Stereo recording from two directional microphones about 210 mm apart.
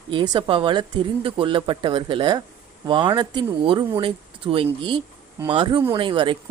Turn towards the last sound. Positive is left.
turn(degrees=-25)  # may be behind; listen again after turning